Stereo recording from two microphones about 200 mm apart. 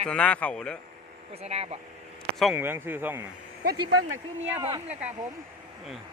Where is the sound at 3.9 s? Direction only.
20° right (ahead or behind).